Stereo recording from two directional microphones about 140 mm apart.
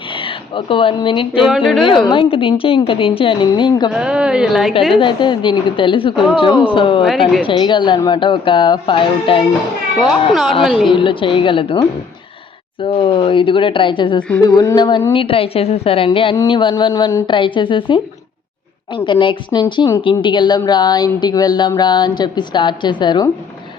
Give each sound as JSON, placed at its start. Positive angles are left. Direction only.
{"t": 0.1, "sound": "speech", "side_deg": 35}
{"t": 1.5, "sound": "speech", "side_deg": 0}
{"t": 2.0, "sound": "speech", "side_deg": 40}
{"t": 3.9, "sound": "speech", "side_deg": -5}
{"t": 4.9, "sound": "speech", "side_deg": 35}
{"t": 10.0, "sound": "speech", "side_deg": 0}
{"t": 10.9, "sound": "speech", "side_deg": 35}
{"t": 14.4, "sound": "a sound", "side_deg": 25}
{"t": 15.1, "sound": "speech", "side_deg": 40}